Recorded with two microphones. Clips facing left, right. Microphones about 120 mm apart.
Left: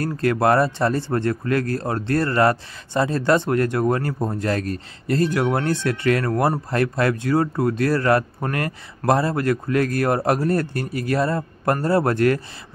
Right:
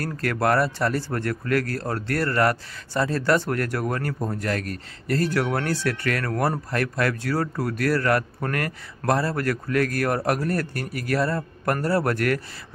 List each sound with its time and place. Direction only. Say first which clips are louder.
0.0 s speech: left 5 dB; 25° left (ahead or behind)